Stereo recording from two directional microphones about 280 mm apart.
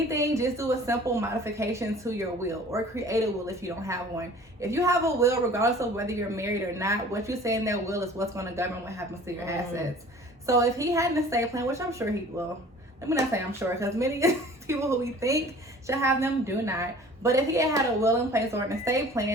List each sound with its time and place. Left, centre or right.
0.1 s a woman's voice: centre